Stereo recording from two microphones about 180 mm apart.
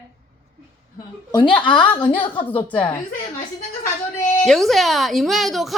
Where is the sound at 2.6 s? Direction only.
5° left (ahead or behind).